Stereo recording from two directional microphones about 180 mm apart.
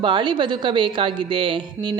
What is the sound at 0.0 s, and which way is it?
Speech, 25° right (ahead or behind).